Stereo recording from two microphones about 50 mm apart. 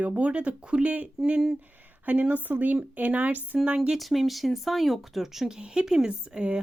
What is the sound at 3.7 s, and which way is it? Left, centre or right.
Speech, right.